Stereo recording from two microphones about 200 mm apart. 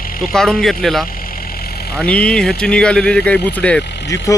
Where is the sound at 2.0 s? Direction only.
5° left (ahead or behind).